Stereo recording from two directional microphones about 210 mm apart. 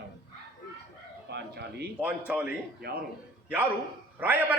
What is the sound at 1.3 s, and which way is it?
Speech, 50° right (ahead or behind).